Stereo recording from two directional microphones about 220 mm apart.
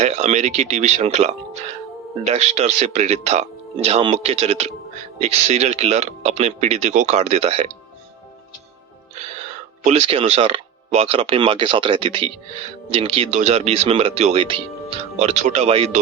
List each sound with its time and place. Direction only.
0.0 s speech: 30° right (ahead or behind)
9.8 s speech: 25° right (ahead or behind)